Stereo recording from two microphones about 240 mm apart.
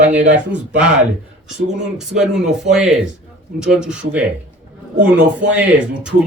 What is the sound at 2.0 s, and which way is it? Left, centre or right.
Speech, centre.